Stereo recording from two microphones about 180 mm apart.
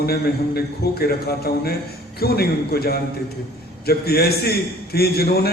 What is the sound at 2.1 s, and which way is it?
A man's voice, 60° left (ahead or behind).